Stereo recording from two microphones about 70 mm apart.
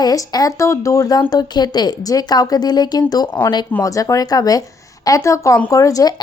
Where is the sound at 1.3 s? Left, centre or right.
Left.